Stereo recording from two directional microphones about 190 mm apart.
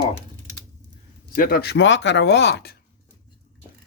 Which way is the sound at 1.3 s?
50° left (ahead or behind).